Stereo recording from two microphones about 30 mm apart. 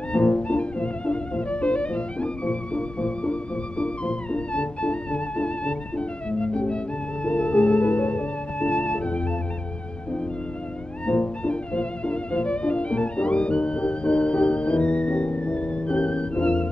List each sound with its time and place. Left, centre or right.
0.1 s music: left
11.1 s music: left